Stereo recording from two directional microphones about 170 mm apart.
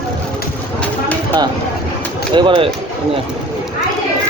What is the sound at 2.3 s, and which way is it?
Speech, 30° right (ahead or behind).